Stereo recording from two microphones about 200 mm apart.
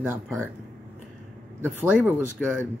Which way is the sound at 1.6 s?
10° right (ahead or behind).